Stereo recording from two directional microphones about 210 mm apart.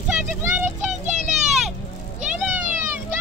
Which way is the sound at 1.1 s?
35° right (ahead or behind).